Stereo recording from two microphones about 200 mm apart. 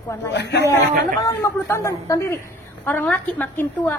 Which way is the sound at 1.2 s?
15° left (ahead or behind).